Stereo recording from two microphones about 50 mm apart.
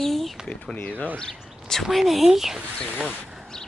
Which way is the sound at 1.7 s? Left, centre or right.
Centre.